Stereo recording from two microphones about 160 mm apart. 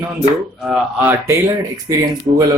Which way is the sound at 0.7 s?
10° right (ahead or behind).